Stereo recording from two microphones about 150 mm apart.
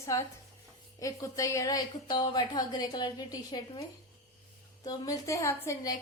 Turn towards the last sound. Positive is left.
turn(degrees=20)  # may be behind; listen again after turning